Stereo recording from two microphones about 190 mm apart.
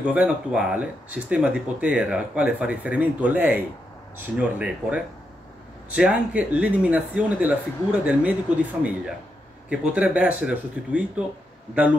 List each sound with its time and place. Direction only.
0.0 s speech: 5° right (ahead or behind)